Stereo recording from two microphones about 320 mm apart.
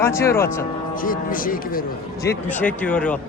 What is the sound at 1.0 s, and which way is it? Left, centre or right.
Speech, left.